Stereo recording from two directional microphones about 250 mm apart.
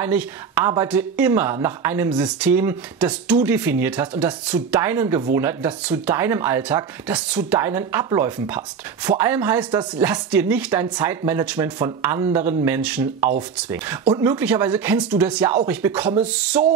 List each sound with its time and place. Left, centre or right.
0.0 s speech: centre
14.4 s speech: centre